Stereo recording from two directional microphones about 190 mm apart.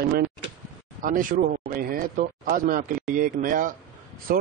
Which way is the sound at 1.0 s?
45° right (ahead or behind).